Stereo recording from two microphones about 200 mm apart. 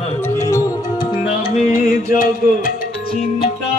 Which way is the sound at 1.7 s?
45° left (ahead or behind).